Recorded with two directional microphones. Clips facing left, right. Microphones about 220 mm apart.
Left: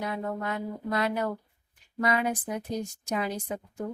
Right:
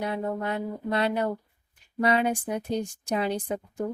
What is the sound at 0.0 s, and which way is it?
Speech, 30° right (ahead or behind).